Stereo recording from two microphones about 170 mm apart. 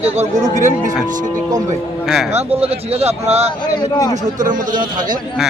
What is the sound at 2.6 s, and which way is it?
Speech, 35° right (ahead or behind).